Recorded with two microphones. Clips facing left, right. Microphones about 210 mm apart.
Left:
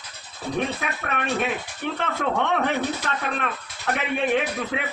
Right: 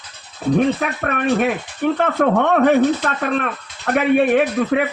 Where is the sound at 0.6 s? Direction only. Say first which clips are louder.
Right 8 dB; 55° right (ahead or behind).